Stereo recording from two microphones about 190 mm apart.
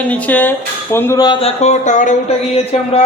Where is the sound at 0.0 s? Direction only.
5° left (ahead or behind).